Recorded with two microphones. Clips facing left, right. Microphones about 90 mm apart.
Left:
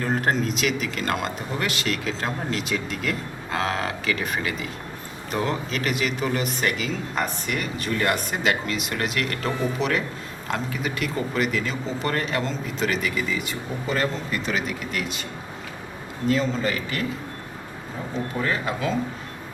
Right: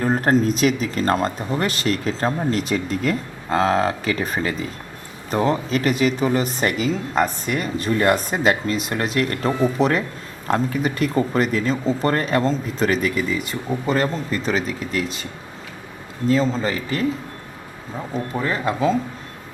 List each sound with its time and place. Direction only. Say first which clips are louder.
0.0 s speech: right 5 dB; 40° right (ahead or behind)
16.3 s speech: right 4 dB; 35° right (ahead or behind)
18.4 s speech: right 6 dB; 35° right (ahead or behind)